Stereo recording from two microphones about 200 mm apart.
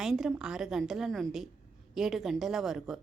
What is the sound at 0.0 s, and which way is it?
A woman's voice, 5° right (ahead or behind).